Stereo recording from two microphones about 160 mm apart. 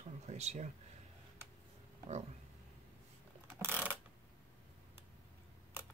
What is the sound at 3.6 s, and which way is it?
Mechanisms, 10° right (ahead or behind).